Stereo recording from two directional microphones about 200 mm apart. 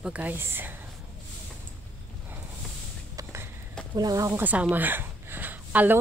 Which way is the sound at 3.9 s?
20° right (ahead or behind).